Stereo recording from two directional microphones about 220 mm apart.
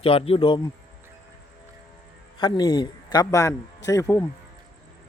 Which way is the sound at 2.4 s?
20° left (ahead or behind).